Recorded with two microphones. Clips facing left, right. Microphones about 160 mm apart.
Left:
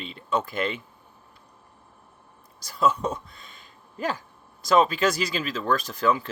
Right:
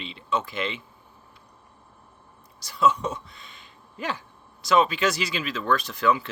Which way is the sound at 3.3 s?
45° left (ahead or behind).